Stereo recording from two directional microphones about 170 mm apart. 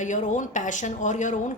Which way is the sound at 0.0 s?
45° left (ahead or behind).